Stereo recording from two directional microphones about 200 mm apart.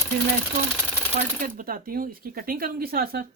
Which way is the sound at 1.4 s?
45° right (ahead or behind).